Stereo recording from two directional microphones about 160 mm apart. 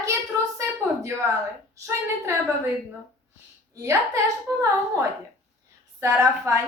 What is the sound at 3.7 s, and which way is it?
Speech, 20° right (ahead or behind).